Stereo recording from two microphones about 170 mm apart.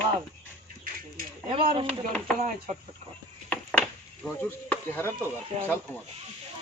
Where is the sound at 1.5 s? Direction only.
35° right (ahead or behind).